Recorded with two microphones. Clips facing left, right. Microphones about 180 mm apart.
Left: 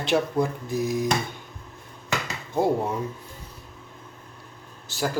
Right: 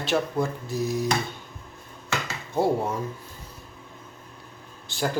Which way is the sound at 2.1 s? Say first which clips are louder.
Left 1 dB; 15° left (ahead or behind).